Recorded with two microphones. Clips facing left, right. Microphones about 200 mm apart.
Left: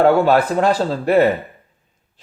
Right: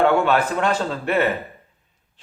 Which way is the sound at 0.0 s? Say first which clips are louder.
Left 4 dB; 35° left (ahead or behind).